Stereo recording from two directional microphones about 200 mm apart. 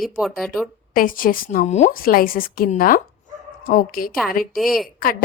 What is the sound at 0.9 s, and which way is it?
A woman's voice, 45° left (ahead or behind).